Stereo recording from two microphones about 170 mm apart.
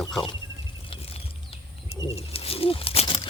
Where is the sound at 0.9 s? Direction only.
35° left (ahead or behind).